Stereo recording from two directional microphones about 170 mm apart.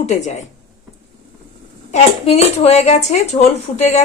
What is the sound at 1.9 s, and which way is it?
A woman's voice, 40° left (ahead or behind).